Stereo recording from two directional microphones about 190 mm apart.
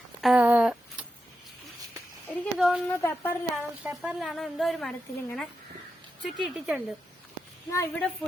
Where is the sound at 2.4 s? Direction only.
Centre (ahead or behind).